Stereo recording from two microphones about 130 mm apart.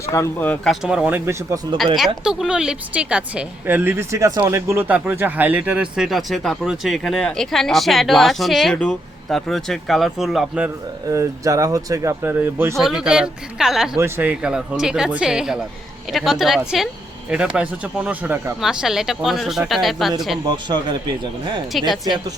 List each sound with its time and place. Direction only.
0.0 s speech: 25° left (ahead or behind)
0.4 s speech: 10° left (ahead or behind)
0.7 s speech: 5° right (ahead or behind); by 1.5 s 20° right (ahead or behind)
2.2 s a woman's voice: 5° right (ahead or behind)
11.1 s speech: 25° right (ahead or behind)
12.7 s a woman's voice: 5° right (ahead or behind)
20.5 s speech: 35° right (ahead or behind)
21.7 s a woman's voice: centre (ahead or behind)